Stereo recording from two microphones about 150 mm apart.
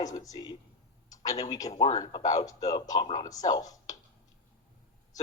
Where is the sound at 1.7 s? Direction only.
45° left (ahead or behind).